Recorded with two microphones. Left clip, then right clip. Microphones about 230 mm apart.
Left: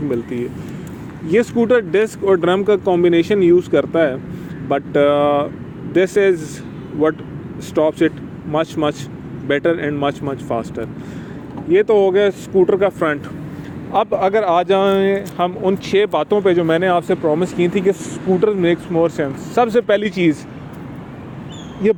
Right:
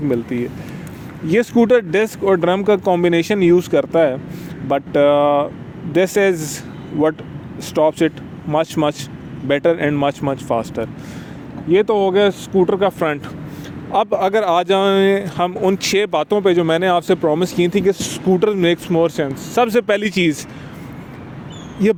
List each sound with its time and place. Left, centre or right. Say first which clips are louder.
0.1 s speech: right 1 dB; right
1.3 s speech: right 1 dB; right
7.7 s speech: even; right
21.8 s speech: left 1 dB; right